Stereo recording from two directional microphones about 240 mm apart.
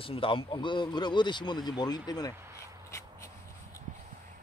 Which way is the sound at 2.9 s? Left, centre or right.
Centre.